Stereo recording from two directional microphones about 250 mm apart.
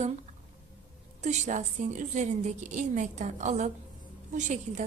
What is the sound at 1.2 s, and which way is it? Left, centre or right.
A woman's voice, right.